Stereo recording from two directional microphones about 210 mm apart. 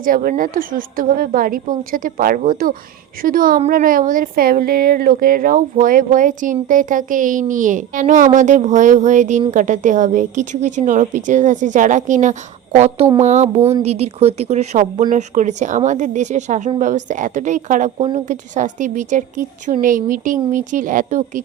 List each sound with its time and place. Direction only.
0.0 s a woman's voice: 45° right (ahead or behind)